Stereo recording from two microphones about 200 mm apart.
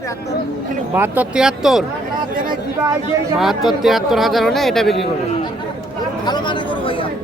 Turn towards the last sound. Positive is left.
turn(degrees=25)  # may be behind; listen again after turning